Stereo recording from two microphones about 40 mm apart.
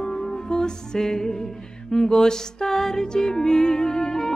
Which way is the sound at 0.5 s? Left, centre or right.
Centre.